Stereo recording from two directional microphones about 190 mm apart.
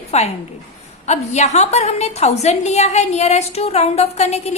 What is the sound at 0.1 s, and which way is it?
A woman's voice, 35° left (ahead or behind).